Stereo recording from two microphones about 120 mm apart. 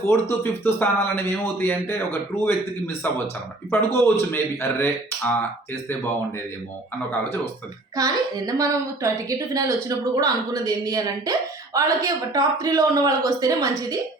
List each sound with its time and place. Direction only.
0.1 s a man's voice: 20° left (ahead or behind)
7.9 s speech: 30° right (ahead or behind)